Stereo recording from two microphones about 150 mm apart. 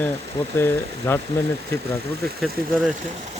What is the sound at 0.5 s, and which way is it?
Speech, 15° left (ahead or behind).